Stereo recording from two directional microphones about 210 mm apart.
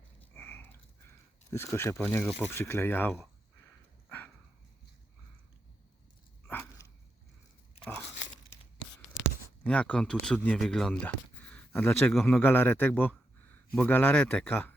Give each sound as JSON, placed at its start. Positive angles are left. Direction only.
{"t": 0.2, "sound": "a sound", "side_deg": 10}
{"t": 1.5, "sound": "speech", "side_deg": 10}
{"t": 6.5, "sound": "dog", "side_deg": 10}
{"t": 9.6, "sound": "speech", "side_deg": 5}